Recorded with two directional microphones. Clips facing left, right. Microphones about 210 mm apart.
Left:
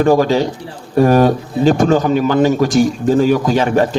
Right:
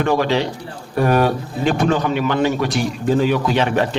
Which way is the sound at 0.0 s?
40° left (ahead or behind).